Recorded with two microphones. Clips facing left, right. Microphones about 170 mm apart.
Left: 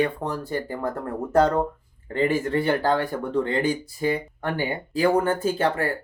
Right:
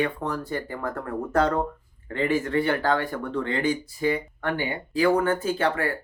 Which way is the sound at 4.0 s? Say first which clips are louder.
Left 1 dB; 40° left (ahead or behind).